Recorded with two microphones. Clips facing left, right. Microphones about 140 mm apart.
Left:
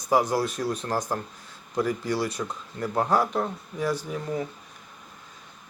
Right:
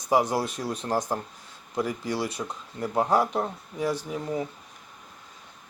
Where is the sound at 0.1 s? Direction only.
25° right (ahead or behind).